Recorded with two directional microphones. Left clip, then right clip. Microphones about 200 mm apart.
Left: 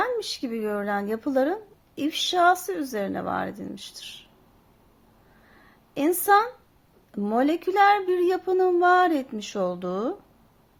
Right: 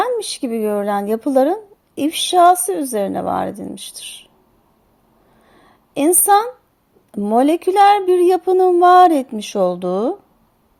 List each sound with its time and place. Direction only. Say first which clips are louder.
0.0 s speech: right 7 dB; 30° right (ahead or behind)
5.5 s a sound: right 5 dB; 30° right (ahead or behind)
7.1 s speech: right 9 dB; 25° right (ahead or behind)